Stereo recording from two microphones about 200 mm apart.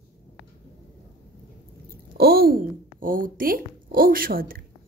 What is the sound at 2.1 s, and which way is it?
Speech, 50° right (ahead or behind).